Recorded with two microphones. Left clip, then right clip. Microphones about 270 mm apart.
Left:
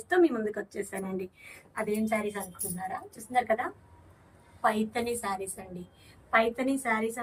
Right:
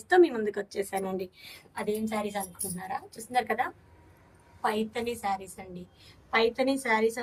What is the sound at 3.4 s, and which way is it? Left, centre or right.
Speech, right.